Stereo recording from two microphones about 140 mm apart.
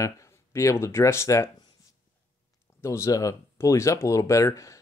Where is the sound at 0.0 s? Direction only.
20° left (ahead or behind).